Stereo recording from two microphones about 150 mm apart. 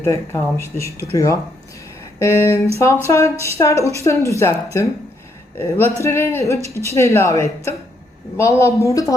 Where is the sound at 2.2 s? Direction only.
20° left (ahead or behind).